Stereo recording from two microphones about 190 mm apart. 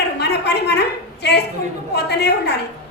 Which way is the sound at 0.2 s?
60° left (ahead or behind).